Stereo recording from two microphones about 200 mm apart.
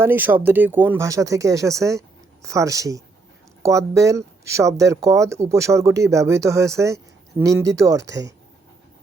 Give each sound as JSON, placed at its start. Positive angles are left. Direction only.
{"t": 0.0, "sound": "speech", "side_deg": -10}